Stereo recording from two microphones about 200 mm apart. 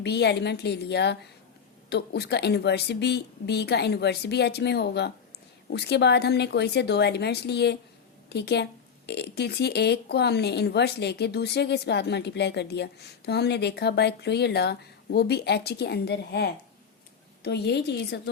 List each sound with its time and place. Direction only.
0.0 s speech: 55° left (ahead or behind)